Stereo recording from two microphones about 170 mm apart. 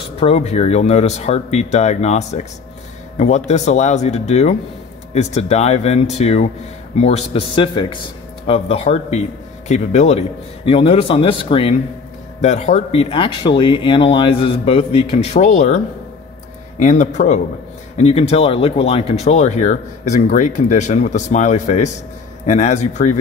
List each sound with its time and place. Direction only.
0.2 s speech: 35° left (ahead or behind)